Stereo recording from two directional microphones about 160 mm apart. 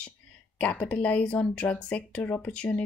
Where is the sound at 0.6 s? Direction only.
10° left (ahead or behind).